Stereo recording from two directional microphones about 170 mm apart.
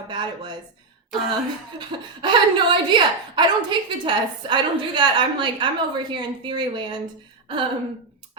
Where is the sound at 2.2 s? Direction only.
25° right (ahead or behind).